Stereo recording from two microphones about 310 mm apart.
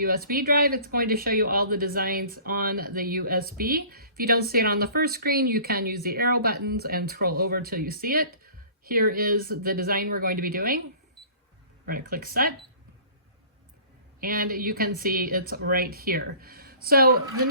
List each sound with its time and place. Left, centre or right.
0.0 s speech: right
11.9 s speech: right
14.2 s speech: right